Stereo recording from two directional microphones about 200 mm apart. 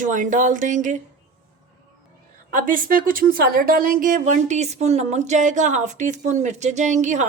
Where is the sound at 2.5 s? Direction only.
45° right (ahead or behind).